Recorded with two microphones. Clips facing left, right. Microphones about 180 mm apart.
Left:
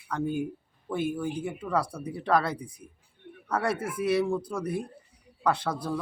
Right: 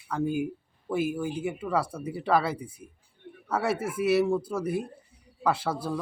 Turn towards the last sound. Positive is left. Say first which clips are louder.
# even
turn(degrees=-5)  # may be behind; listen again after turning